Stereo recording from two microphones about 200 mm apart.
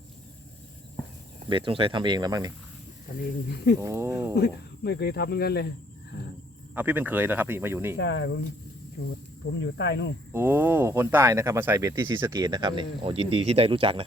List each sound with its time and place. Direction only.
1.5 s speech: 25° right (ahead or behind)
3.8 s speech: 10° right (ahead or behind)
4.4 s speech: 55° left (ahead or behind)
6.7 s speech: 10° right (ahead or behind)
7.9 s speech: 60° left (ahead or behind)
10.3 s speech: 10° right (ahead or behind); by 14.0 s 25° right (ahead or behind)